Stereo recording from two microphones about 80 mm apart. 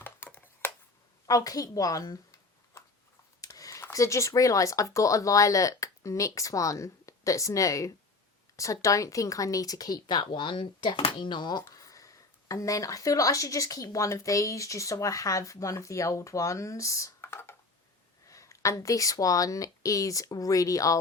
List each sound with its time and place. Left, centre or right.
0.0 s computer keyboard: left
1.3 s speech: left
3.4 s a sound: left
3.9 s speech: left
11.7 s speech: left